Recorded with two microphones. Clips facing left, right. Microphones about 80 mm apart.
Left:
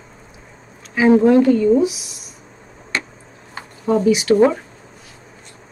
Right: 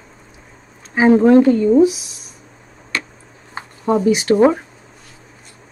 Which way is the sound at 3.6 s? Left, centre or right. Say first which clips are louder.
Right 3 dB; right.